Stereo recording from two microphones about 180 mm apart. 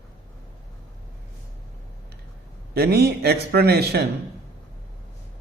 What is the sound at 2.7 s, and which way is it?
A man's voice, 60° right (ahead or behind).